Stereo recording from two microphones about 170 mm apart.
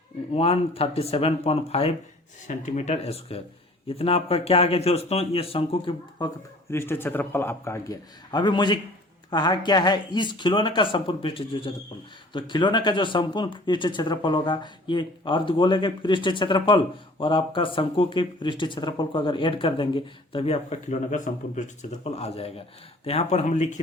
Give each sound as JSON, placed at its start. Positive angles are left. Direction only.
{"t": 0.3, "sound": "speech", "side_deg": 35}
{"t": 2.5, "sound": "speech", "side_deg": 45}
{"t": 6.7, "sound": "a man's voice", "side_deg": 15}